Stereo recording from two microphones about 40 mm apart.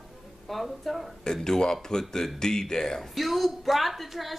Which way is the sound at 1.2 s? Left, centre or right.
Centre.